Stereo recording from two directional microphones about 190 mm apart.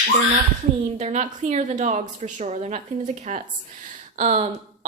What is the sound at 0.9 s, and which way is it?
Speech, 35° right (ahead or behind).